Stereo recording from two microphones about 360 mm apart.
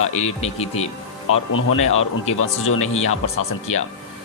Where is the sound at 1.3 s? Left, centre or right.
Left.